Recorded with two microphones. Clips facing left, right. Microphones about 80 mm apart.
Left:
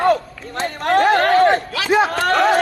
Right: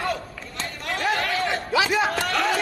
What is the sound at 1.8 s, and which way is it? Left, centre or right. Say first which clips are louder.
Speech: left 7 dB; left.